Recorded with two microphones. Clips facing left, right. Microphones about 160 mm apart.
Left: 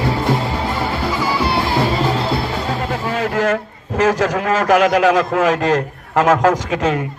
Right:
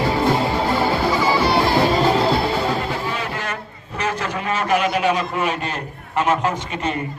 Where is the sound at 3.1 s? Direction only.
90° left.